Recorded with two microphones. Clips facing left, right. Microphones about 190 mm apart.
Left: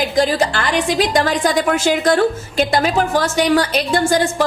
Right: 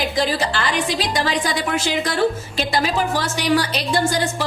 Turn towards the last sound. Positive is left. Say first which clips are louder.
# left 4 dB
turn(degrees=50)  # may be behind; listen again after turning